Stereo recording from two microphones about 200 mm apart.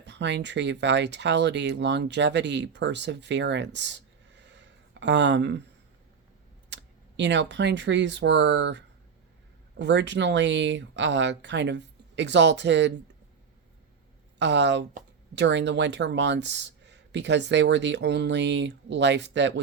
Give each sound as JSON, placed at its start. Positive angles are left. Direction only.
{"t": 0.0, "sound": "speech", "side_deg": -60}
{"t": 6.7, "sound": "a sound", "side_deg": -65}
{"t": 7.2, "sound": "speech", "side_deg": -60}
{"t": 14.3, "sound": "speech", "side_deg": -60}